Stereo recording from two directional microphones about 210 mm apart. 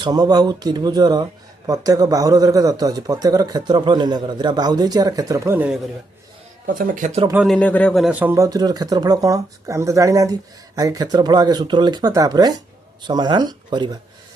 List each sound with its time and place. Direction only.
0.0 s speech: 20° right (ahead or behind)
6.7 s speech: 40° right (ahead or behind)
7.3 s speech: centre (ahead or behind); by 14.0 s 20° right (ahead or behind)